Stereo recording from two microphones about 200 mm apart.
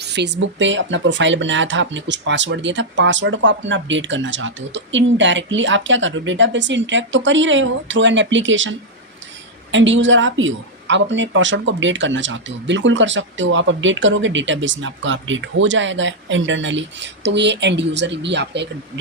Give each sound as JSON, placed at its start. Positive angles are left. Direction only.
{"t": 0.0, "sound": "a woman's voice", "side_deg": -60}
{"t": 9.7, "sound": "a woman's voice", "side_deg": -70}